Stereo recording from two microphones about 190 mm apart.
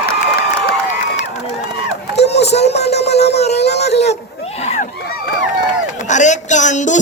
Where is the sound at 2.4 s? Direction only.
35° left (ahead or behind).